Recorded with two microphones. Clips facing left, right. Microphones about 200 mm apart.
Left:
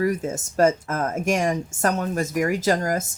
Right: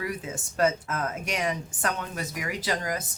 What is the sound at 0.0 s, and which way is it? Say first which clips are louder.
Speech: left 10 dB; 45° left (ahead or behind).